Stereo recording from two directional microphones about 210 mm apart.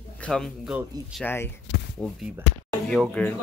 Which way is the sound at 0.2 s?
Centre (ahead or behind).